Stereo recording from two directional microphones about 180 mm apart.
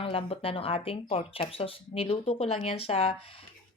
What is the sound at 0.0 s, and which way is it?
Speech, 30° left (ahead or behind).